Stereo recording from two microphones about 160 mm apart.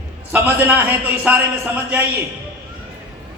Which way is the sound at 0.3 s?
15° right (ahead or behind).